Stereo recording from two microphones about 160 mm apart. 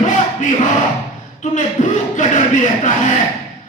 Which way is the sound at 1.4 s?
50° left (ahead or behind).